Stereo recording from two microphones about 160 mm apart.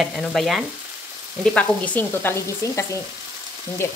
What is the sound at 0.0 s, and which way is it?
Frying, centre (ahead or behind).